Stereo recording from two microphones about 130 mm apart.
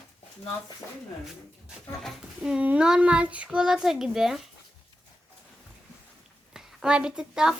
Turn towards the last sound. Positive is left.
turn(degrees=-5)  # may be behind; listen again after turning